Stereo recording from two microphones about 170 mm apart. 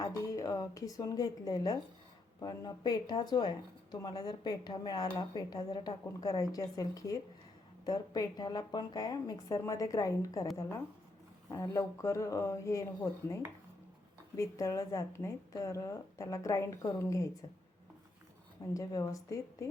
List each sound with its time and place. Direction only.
0.0 s speech: 20° left (ahead or behind)
18.6 s speech: 20° left (ahead or behind)